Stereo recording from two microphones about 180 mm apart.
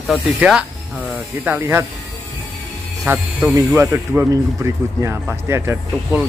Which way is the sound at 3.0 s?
10° right (ahead or behind).